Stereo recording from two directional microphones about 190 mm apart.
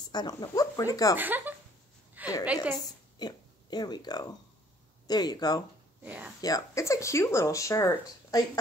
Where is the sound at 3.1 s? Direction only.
20° left (ahead or behind).